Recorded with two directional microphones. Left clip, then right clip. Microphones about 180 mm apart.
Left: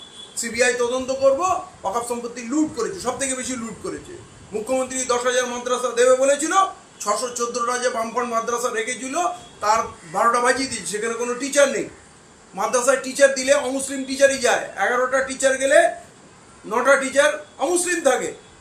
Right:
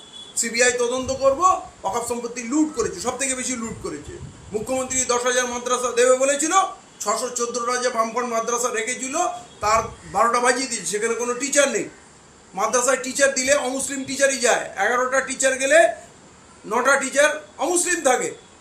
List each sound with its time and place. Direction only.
0.3 s a man's voice: 15° right (ahead or behind)